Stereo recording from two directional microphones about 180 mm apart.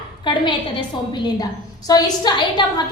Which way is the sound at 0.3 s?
25° left (ahead or behind).